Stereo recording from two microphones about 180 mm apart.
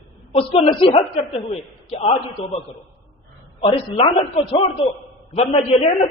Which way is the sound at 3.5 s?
30° left (ahead or behind).